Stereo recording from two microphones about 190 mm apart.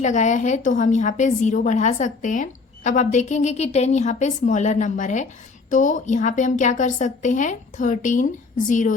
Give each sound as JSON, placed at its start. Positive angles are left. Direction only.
{"t": 0.0, "sound": "a woman's voice", "side_deg": 40}